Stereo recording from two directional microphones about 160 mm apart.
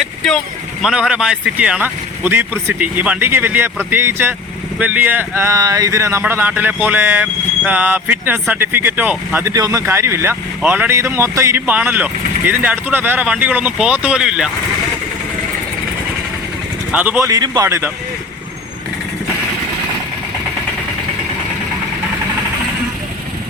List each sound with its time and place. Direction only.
0.0 s speech: centre (ahead or behind)
16.9 s speech: 10° right (ahead or behind)